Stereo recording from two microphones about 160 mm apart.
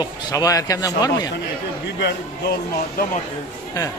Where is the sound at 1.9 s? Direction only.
90° left.